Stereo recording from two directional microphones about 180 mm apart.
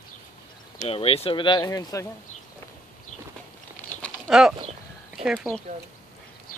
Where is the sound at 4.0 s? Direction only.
Centre (ahead or behind).